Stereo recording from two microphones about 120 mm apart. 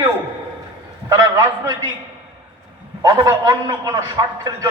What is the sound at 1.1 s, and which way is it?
Speech, 25° right (ahead or behind).